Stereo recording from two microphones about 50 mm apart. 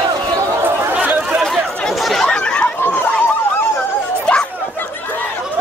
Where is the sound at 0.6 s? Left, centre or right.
Right.